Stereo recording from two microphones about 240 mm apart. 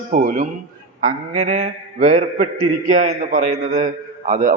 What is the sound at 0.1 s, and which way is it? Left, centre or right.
A man's voice, right.